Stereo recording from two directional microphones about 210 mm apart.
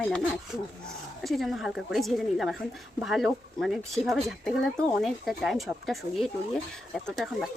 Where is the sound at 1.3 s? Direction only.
Centre (ahead or behind).